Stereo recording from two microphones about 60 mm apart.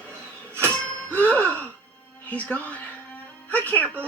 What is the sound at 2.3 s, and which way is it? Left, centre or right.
Speech, left.